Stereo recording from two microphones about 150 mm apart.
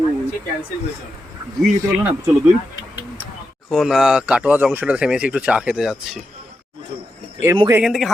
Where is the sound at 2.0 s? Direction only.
10° right (ahead or behind).